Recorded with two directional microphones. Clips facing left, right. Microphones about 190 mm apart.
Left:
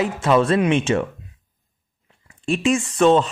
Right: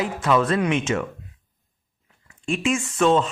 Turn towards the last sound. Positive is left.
turn(degrees=35)  # may be behind; listen again after turning